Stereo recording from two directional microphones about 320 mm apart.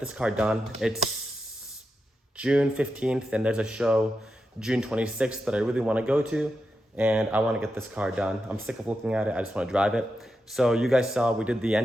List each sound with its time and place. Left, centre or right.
0.0 s speech: centre
2.4 s speech: centre